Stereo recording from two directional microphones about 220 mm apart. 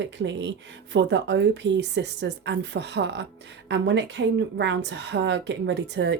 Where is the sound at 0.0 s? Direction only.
55° right (ahead or behind).